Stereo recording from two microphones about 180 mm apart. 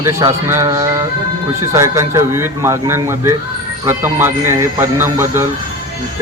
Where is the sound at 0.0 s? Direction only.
15° right (ahead or behind).